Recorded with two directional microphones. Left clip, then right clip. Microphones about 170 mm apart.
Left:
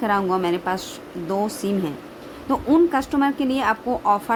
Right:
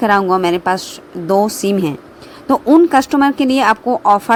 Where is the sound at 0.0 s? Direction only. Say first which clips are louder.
Right 8 dB; 45° right (ahead or behind).